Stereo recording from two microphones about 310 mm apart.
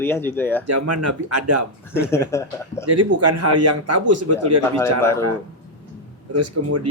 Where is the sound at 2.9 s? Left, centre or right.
Right.